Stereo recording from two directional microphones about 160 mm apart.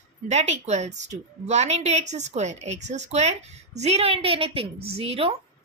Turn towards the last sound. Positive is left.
turn(degrees=-35)  # may be behind; listen again after turning